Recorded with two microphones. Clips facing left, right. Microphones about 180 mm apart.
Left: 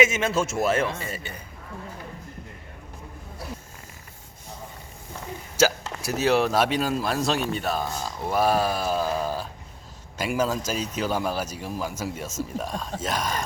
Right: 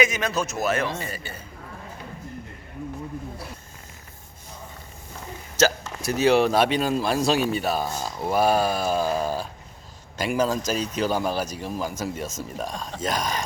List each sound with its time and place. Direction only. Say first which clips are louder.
0.0 s speech: left 2 dB; 25° left (ahead or behind)
5.5 s a man's voice: even; 10° left (ahead or behind)